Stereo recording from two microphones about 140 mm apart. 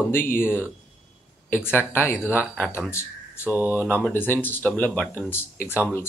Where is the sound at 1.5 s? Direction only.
15° left (ahead or behind).